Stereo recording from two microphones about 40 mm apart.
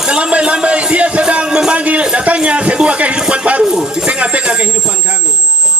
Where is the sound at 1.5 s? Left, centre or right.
Centre.